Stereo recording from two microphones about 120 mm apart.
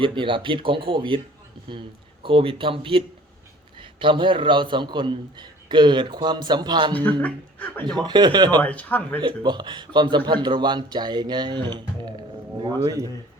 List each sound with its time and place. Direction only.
0.0 s speech: 45° right (ahead or behind)
2.2 s a man's voice: 45° right (ahead or behind)
7.2 s speech: 10° left (ahead or behind)
7.9 s a man's voice: 35° right (ahead or behind)
8.6 s speech: 10° left (ahead or behind)
9.2 s a man's voice: 40° right (ahead or behind)